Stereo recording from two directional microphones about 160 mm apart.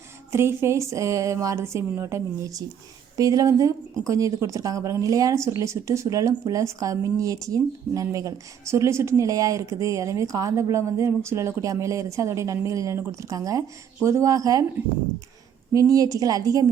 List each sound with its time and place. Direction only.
0.3 s speech: 15° right (ahead or behind)
15.7 s speech: 20° right (ahead or behind)